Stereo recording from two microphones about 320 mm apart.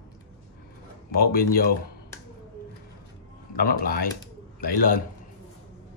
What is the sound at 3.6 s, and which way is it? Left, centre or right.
Speech, left.